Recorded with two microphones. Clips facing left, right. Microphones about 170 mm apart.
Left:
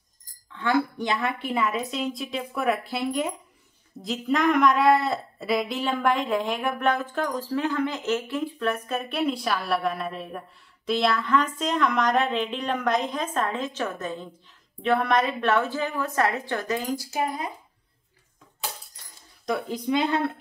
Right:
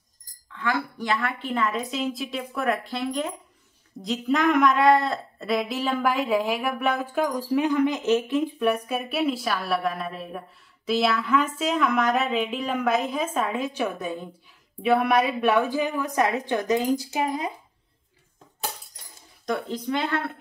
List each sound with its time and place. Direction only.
0.6 s a woman's voice: 20° left (ahead or behind); by 17.5 s 20° right (ahead or behind)
19.4 s speech: centre (ahead or behind)
19.9 s a woman's voice: 15° left (ahead or behind)